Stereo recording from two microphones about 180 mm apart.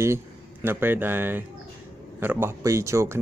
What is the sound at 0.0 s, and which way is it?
Speech, 15° right (ahead or behind).